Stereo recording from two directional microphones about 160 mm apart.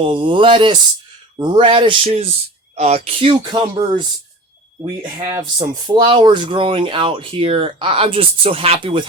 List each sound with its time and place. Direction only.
0.0 s speech: 35° right (ahead or behind)
5.4 s speech: 30° right (ahead or behind)